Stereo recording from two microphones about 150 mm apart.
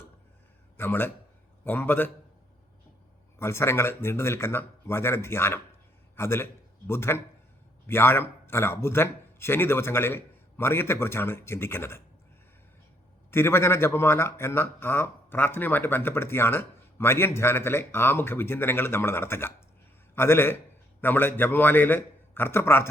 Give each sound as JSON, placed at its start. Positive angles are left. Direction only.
{"t": 0.8, "sound": "speech", "side_deg": 15}
{"t": 3.3, "sound": "a man's voice", "side_deg": 15}
{"t": 13.3, "sound": "speech", "side_deg": 15}